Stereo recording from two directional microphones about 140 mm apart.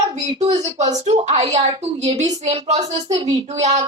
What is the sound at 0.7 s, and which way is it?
A woman's voice, 55° right (ahead or behind).